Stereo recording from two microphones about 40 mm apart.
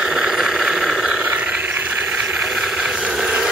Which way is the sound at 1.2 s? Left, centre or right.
Right.